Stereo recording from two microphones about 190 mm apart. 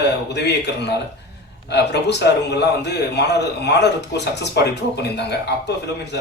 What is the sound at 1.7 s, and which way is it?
A man's voice, 65° left (ahead or behind).